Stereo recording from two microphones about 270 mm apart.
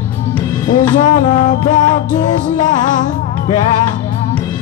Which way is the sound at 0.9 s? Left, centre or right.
Left.